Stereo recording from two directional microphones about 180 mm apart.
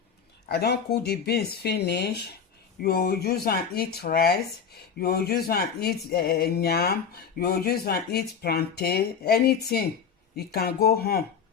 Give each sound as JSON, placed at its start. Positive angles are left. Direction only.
{"t": 0.4, "sound": "speech", "side_deg": 60}